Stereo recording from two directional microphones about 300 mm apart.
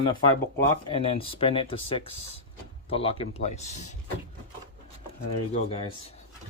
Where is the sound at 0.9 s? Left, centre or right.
Centre.